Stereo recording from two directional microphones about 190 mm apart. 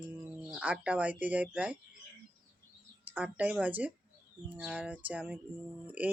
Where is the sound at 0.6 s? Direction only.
5° right (ahead or behind).